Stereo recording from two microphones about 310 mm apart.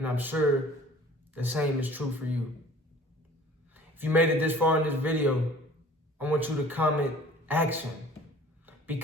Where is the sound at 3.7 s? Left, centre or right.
Centre.